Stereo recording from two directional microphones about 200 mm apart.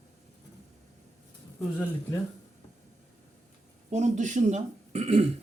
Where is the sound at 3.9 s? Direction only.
35° right (ahead or behind).